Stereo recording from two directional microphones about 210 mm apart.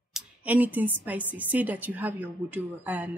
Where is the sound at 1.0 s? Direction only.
10° right (ahead or behind).